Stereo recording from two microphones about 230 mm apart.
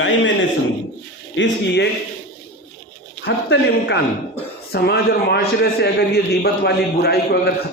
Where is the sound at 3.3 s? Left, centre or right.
Left.